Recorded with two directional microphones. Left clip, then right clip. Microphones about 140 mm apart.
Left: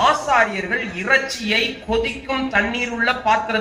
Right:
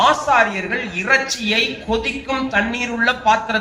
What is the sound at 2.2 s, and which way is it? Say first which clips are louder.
Speech: right 1 dB; 35° right (ahead or behind).